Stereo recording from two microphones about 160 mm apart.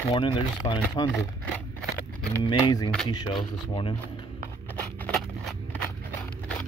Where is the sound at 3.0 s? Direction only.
25° left (ahead or behind).